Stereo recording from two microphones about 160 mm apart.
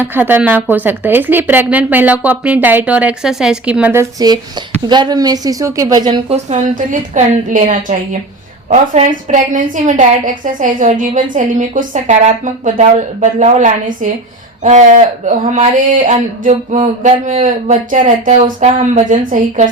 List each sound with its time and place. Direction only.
0.0 s a woman's voice: 10° right (ahead or behind)
4.2 s a woman's voice: 25° right (ahead or behind)
6.3 s a woman's voice: 50° right (ahead or behind)